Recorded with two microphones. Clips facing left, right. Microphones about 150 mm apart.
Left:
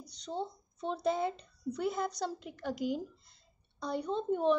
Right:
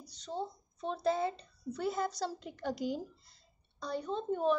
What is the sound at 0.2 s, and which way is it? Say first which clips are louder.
A woman's voice: left 1 dB; 25° left (ahead or behind).